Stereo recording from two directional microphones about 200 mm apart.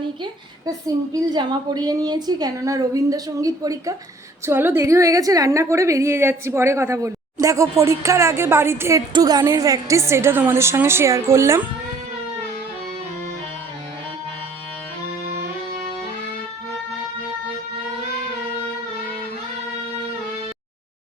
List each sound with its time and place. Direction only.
0.2 s a woman's voice: 20° right (ahead or behind)